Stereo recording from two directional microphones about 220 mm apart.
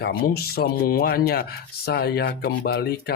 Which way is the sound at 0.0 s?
45° left (ahead or behind).